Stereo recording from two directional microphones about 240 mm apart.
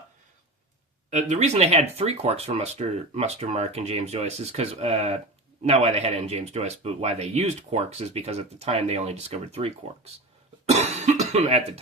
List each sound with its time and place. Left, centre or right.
1.1 s speech: right